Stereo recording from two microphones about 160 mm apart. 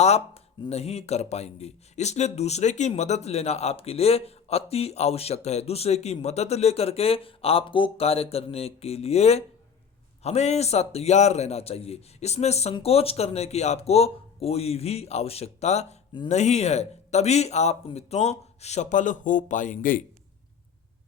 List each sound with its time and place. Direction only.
0.7 s speech: 40° left (ahead or behind)